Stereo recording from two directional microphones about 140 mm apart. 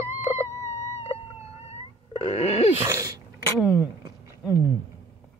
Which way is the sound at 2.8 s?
25° right (ahead or behind).